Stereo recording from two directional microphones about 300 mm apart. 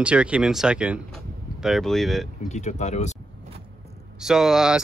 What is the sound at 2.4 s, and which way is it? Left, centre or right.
Speech, left.